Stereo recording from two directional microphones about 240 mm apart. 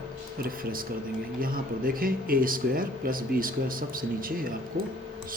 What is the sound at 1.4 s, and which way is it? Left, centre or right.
Speech, right.